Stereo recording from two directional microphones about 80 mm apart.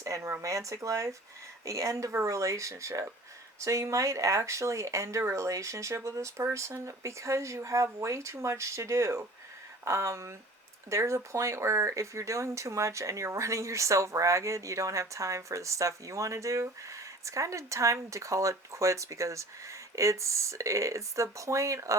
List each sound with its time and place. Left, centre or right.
0.0 s speech: right